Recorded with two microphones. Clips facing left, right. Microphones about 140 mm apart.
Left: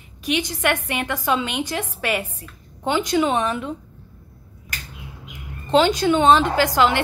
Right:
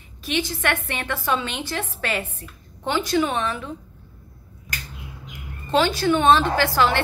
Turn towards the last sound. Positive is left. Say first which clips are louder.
# left 2 dB
turn(degrees=15)  # may be behind; listen again after turning